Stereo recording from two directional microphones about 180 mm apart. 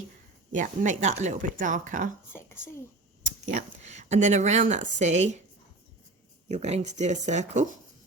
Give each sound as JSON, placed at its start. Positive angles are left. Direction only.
{"t": 0.5, "sound": "speech", "side_deg": -45}
{"t": 3.2, "sound": "speech", "side_deg": -40}
{"t": 6.5, "sound": "speech", "side_deg": -40}